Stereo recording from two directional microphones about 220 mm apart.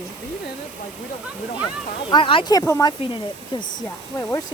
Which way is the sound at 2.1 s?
25° left (ahead or behind).